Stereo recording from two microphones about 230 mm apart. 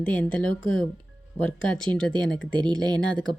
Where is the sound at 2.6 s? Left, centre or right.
Centre.